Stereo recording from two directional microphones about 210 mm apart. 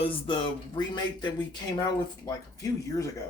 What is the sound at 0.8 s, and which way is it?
A man's voice, 20° left (ahead or behind).